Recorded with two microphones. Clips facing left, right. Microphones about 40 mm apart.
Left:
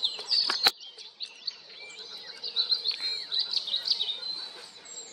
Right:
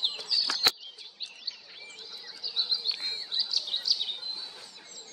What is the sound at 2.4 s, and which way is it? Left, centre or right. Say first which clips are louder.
Frog: left 1 dB; left.